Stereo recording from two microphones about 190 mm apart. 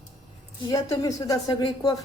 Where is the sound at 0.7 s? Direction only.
15° left (ahead or behind).